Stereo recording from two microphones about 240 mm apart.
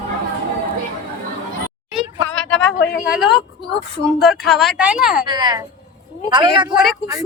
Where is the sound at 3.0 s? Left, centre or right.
Centre.